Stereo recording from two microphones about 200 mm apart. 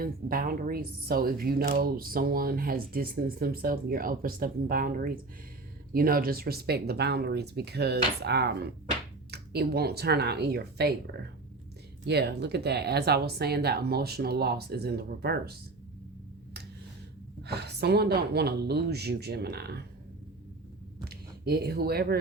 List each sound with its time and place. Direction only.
0.0 s a woman's voice: 45° right (ahead or behind)
17.4 s a woman's voice: 55° right (ahead or behind)
21.1 s speech: 50° right (ahead or behind)